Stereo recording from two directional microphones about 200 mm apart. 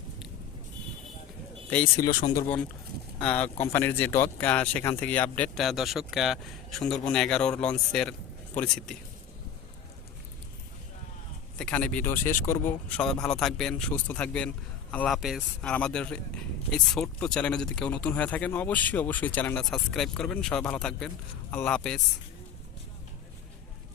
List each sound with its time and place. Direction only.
1.7 s speech: 10° left (ahead or behind)
11.6 s speech: 5° left (ahead or behind)